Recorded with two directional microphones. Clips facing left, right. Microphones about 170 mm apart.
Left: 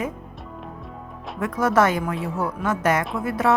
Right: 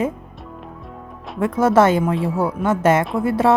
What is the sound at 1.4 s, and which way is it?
Speech, 25° right (ahead or behind).